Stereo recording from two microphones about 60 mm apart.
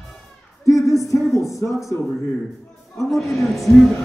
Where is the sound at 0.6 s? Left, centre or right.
Left.